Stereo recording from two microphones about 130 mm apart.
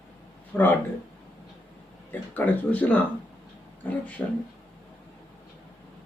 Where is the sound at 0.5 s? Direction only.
15° left (ahead or behind).